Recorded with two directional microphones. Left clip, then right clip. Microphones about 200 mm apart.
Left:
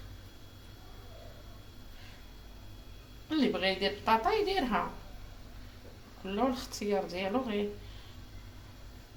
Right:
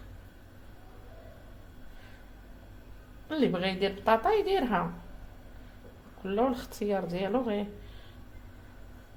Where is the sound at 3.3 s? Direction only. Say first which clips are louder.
Right 1 dB; 55° right (ahead or behind).